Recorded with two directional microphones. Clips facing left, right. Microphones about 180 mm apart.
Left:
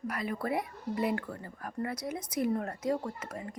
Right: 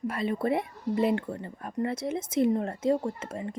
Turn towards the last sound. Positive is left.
turn(degrees=-25)  # may be behind; listen again after turning